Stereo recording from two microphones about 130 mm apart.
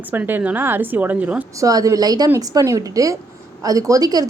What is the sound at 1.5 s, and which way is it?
A woman's voice, 25° right (ahead or behind).